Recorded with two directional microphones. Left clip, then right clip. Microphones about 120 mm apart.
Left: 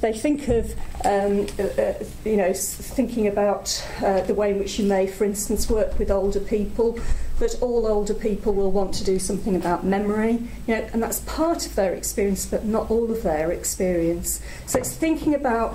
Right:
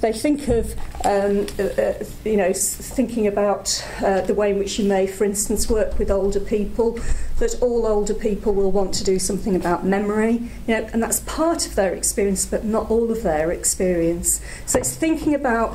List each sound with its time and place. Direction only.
0.0 s a woman's voice: 20° right (ahead or behind)